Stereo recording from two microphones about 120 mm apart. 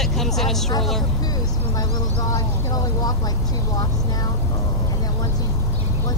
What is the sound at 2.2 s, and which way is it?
Speech, 30° left (ahead or behind).